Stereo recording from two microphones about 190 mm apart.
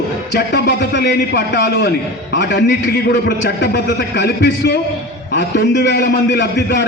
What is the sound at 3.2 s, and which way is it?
A man's voice, 60° left (ahead or behind).